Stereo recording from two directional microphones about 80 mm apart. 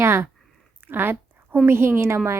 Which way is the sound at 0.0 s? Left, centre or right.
Right.